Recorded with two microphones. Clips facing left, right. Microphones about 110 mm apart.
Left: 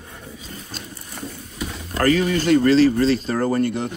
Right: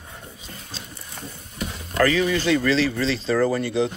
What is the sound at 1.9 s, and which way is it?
Speech, 40° left (ahead or behind).